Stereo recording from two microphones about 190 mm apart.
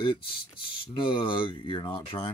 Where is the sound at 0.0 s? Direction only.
25° left (ahead or behind).